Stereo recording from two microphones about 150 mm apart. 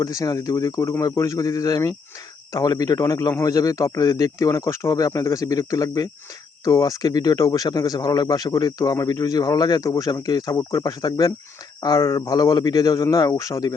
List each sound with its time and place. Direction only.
0.0 s speech: 25° left (ahead or behind)